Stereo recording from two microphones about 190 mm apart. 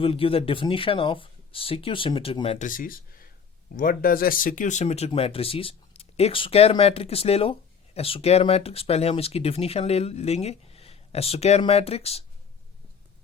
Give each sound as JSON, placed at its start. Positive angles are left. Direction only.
{"t": 0.0, "sound": "speech", "side_deg": 30}
{"t": 2.6, "sound": "speech", "side_deg": 45}